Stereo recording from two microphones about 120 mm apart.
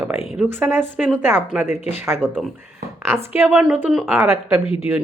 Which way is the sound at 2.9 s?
20° right (ahead or behind).